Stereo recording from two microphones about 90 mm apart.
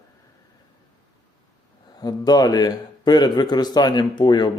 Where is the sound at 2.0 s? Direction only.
45° left (ahead or behind).